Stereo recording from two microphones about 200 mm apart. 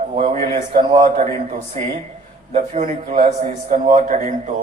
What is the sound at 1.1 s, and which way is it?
A man's voice, 35° right (ahead or behind).